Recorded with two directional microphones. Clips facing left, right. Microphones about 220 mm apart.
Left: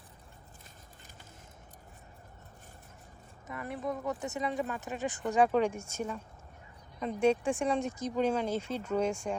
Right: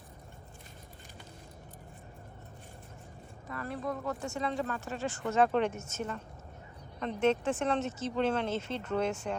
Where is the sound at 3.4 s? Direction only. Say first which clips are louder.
Even; 20° left (ahead or behind).